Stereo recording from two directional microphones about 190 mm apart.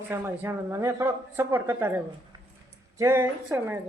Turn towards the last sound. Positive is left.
turn(degrees=-10)  # may be behind; listen again after turning